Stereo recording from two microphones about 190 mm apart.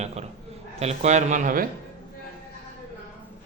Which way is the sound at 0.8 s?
35° right (ahead or behind).